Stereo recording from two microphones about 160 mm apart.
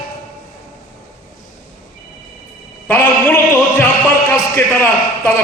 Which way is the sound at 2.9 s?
15° left (ahead or behind).